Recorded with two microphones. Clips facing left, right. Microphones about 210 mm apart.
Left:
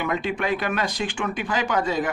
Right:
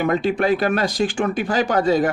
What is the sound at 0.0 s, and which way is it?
Speech, 40° right (ahead or behind).